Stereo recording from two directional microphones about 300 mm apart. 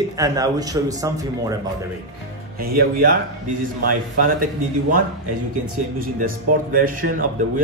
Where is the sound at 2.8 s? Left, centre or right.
Right.